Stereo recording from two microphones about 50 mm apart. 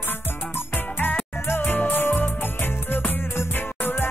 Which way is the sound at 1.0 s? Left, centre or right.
Left.